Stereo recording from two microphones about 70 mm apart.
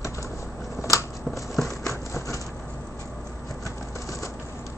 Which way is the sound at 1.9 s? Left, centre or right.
Left.